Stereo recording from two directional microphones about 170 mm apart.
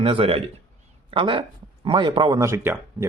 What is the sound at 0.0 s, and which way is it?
A man's voice, 35° right (ahead or behind).